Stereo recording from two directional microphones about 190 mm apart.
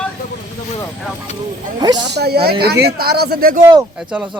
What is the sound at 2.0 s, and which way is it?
Speech, 60° right (ahead or behind).